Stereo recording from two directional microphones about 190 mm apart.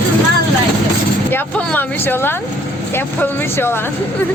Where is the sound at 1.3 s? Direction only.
10° left (ahead or behind).